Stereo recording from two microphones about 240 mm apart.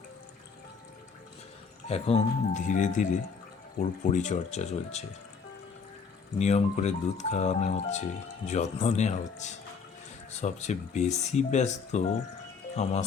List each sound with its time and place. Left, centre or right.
1.9 s speech: left
6.4 s speech: left